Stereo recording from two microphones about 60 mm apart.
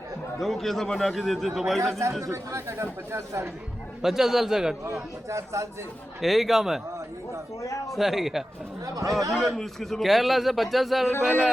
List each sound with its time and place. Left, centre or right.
0.3 s a man's voice: centre
1.8 s speech: right
4.0 s a man's voice: centre
5.3 s speech: right
6.2 s a man's voice: centre
7.6 s speech: left
7.9 s a man's voice: centre
11.1 s speech: left